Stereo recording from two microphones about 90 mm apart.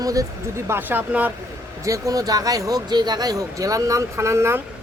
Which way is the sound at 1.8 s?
35° right (ahead or behind).